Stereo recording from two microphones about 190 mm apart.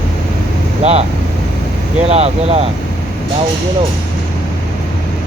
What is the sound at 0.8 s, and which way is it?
Vehicle, 35° right (ahead or behind).